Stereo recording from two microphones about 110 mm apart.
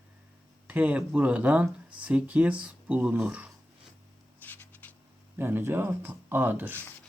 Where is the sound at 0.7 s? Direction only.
15° right (ahead or behind).